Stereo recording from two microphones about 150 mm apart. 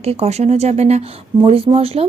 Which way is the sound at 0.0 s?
45° right (ahead or behind).